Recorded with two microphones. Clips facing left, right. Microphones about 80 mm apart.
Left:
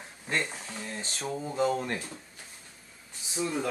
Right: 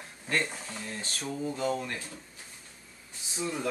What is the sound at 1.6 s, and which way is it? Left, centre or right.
Speech, left.